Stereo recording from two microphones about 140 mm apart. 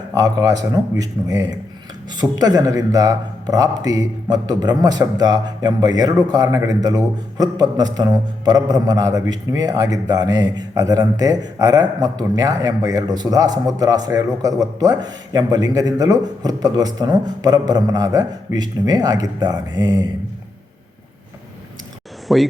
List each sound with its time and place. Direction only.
0.1 s a man's voice: 25° right (ahead or behind)
22.3 s speech: centre (ahead or behind)